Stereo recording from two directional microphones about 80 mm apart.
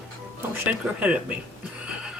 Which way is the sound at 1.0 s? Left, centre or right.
Centre.